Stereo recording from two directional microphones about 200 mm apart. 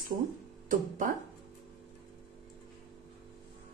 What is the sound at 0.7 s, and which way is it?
Speech, 40° right (ahead or behind).